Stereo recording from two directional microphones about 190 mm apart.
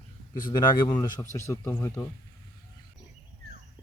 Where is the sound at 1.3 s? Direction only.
15° left (ahead or behind).